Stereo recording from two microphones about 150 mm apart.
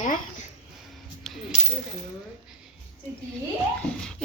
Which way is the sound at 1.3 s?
Centre (ahead or behind).